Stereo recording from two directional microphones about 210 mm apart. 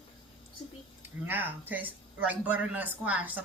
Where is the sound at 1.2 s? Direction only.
10° right (ahead or behind).